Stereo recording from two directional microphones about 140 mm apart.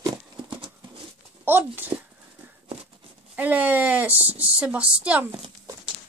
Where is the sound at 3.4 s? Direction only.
10° right (ahead or behind).